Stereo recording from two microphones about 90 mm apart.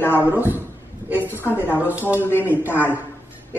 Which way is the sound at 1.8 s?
20° right (ahead or behind).